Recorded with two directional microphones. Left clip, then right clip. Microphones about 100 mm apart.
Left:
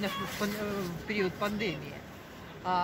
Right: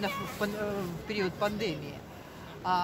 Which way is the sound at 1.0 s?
40° right (ahead or behind).